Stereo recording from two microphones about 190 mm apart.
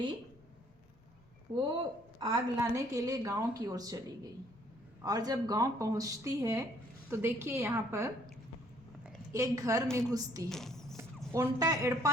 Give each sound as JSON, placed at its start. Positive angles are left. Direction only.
{"t": 2.1, "sound": "a woman's voice", "side_deg": -20}
{"t": 9.3, "sound": "a woman's voice", "side_deg": -15}
{"t": 10.5, "sound": "a sound", "side_deg": 0}
{"t": 11.3, "sound": "a woman's voice", "side_deg": -15}